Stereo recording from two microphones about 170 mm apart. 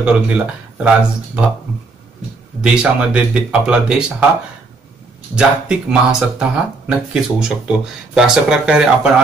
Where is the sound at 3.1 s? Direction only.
5° right (ahead or behind).